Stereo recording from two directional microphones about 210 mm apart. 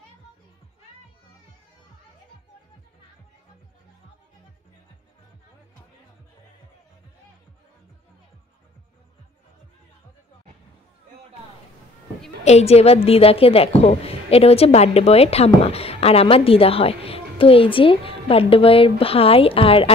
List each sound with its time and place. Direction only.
12.4 s a woman's voice: 30° left (ahead or behind)